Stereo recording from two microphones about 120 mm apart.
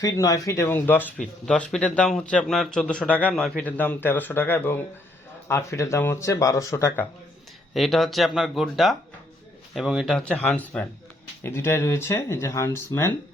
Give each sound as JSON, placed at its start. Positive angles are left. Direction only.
{"t": 0.0, "sound": "speech", "side_deg": 30}
{"t": 0.7, "sound": "a man's voice", "side_deg": 15}
{"t": 7.7, "sound": "speech", "side_deg": 0}
{"t": 10.2, "sound": "a man's voice", "side_deg": 10}